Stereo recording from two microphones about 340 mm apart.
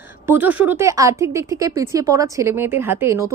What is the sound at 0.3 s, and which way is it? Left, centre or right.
A woman's voice, centre.